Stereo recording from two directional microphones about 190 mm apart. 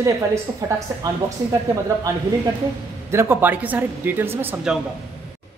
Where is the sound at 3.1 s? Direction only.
15° right (ahead or behind).